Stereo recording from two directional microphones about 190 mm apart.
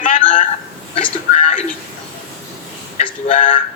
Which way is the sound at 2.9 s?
40° left (ahead or behind).